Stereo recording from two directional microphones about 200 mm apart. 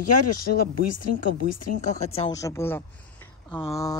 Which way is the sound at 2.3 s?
15° left (ahead or behind).